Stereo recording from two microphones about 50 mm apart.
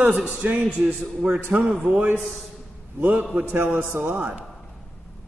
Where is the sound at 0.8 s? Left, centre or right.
Right.